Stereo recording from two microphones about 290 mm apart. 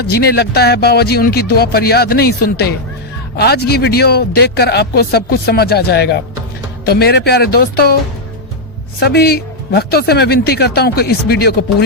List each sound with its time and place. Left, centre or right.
0.0 s a man's voice: left
9.0 s a man's voice: left